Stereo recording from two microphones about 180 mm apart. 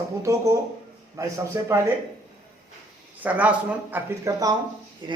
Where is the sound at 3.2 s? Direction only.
10° right (ahead or behind); by 5.2 s 25° right (ahead or behind).